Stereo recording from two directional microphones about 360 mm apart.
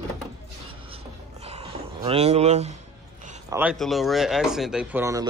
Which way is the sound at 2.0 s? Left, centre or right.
Centre.